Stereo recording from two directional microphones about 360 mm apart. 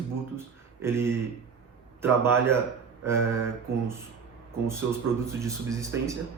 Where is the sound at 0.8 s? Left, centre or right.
Centre.